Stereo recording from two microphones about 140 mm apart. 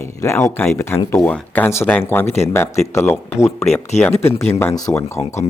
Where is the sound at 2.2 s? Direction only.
50° left (ahead or behind).